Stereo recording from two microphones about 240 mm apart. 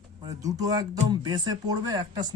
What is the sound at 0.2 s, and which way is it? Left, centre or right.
Speech, centre.